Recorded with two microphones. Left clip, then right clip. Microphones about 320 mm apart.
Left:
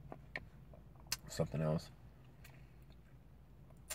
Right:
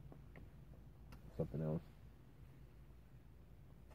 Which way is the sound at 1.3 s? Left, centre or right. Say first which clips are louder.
Left 5 dB; left.